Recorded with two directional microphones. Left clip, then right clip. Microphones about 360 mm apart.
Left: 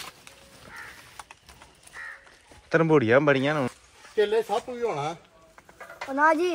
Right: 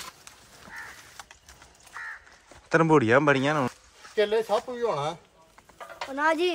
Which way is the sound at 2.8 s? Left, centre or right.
Centre.